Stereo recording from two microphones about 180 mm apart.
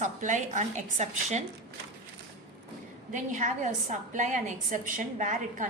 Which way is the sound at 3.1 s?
45° right (ahead or behind).